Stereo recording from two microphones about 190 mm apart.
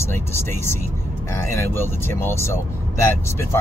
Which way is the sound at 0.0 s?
15° left (ahead or behind).